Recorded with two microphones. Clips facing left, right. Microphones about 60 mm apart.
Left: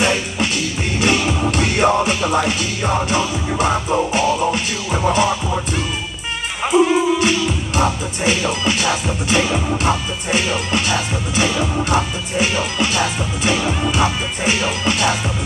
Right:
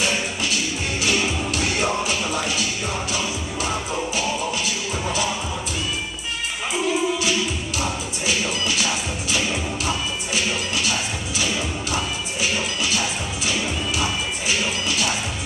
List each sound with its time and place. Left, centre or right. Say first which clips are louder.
0.0 s music: left 6 dB; left
1.6 s music: left 8 dB; left
6.7 s music: left 9 dB; left